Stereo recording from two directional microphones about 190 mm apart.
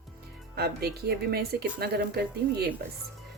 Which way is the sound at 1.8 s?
55° right (ahead or behind).